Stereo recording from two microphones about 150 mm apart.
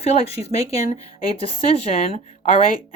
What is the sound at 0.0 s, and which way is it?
Speech, 45° left (ahead or behind).